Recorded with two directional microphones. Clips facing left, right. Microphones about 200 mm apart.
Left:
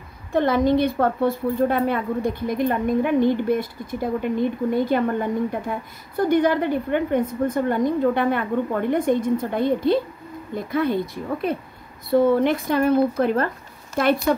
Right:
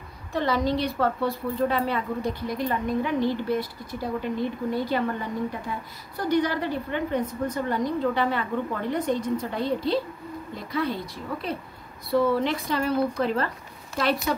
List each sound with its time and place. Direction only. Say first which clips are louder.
0.3 s a woman's voice: left 6 dB; 50° left (ahead or behind)